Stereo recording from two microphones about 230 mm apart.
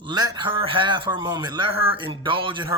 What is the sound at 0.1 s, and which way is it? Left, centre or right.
A man's voice, centre.